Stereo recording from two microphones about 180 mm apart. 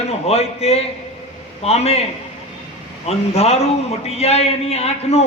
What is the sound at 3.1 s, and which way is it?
A man's voice, 35° left (ahead or behind).